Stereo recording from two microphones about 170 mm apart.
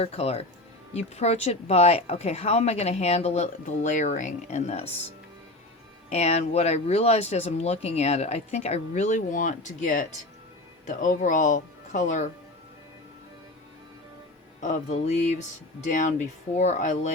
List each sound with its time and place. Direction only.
0.0 s speech: 35° left (ahead or behind)
6.1 s speech: 40° left (ahead or behind)
14.6 s speech: 45° left (ahead or behind)